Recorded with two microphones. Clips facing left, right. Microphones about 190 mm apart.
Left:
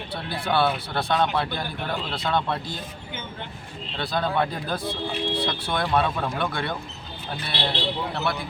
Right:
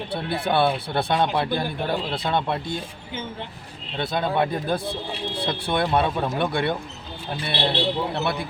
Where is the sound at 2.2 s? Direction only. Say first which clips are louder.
Left 1 dB; 15° right (ahead or behind).